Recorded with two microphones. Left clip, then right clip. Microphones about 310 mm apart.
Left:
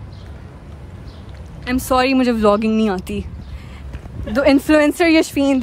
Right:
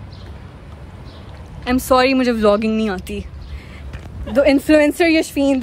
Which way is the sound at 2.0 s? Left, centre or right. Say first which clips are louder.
Right 1 dB; centre.